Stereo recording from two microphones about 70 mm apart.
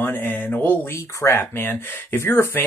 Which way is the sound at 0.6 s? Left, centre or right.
Left.